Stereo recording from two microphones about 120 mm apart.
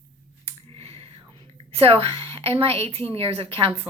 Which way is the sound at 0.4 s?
55° right (ahead or behind).